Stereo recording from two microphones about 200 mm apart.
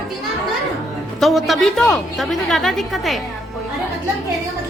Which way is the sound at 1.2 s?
Centre (ahead or behind).